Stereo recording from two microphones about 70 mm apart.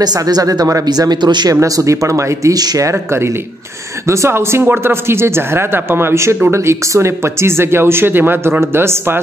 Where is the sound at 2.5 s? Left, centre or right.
Right.